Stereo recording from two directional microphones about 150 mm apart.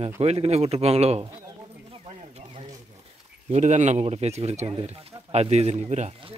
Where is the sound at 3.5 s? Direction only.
50° right (ahead or behind).